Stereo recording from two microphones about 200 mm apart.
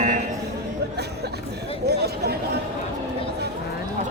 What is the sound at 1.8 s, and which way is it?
Chatter, 55° right (ahead or behind).